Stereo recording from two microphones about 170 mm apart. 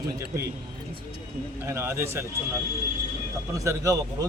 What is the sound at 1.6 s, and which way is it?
Speech, 15° right (ahead or behind).